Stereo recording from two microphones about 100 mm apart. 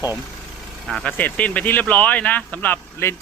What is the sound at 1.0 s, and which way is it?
Speech, 15° left (ahead or behind).